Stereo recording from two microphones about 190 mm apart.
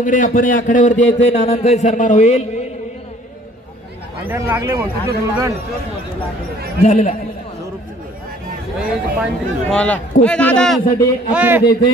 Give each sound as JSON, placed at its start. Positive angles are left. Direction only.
{"t": 0.0, "sound": "a man's voice", "side_deg": 40}
{"t": 4.3, "sound": "speech", "side_deg": -15}
{"t": 6.8, "sound": "a man's voice", "side_deg": 40}
{"t": 8.7, "sound": "speech", "side_deg": -5}
{"t": 11.3, "sound": "speech", "side_deg": -10}